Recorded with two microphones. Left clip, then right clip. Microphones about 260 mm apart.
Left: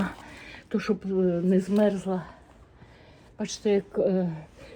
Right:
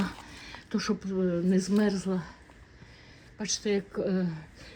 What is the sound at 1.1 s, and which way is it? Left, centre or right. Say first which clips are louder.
Speech: left 4 dB; left.